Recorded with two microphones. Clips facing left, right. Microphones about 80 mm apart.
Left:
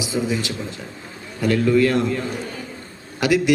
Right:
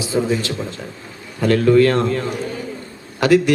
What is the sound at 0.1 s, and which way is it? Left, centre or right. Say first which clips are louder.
Speech: right 4 dB; right.